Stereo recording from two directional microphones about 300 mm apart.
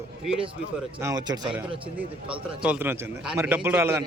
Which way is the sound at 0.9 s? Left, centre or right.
Centre.